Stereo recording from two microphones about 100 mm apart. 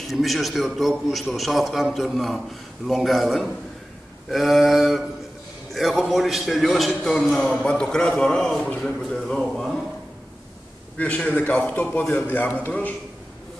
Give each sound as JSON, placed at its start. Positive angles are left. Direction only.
{"t": 0.1, "sound": "a man's voice", "side_deg": 0}
{"t": 11.0, "sound": "a man's voice", "side_deg": 10}